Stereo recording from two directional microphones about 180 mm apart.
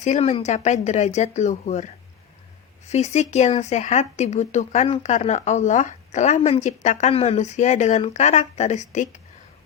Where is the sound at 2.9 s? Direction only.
40° left (ahead or behind).